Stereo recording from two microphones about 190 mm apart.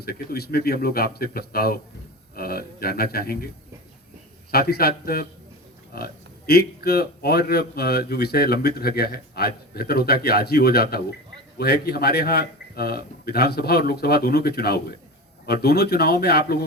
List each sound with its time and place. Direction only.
0.0 s speech: 55° left (ahead or behind)
4.5 s a man's voice: 55° left (ahead or behind)